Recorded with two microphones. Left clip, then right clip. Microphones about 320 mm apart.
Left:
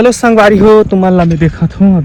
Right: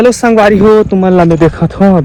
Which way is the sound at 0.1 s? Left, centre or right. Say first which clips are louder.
Even; centre.